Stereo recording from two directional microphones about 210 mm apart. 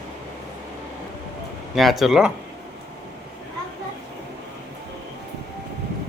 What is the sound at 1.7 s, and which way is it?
Speech, centre (ahead or behind).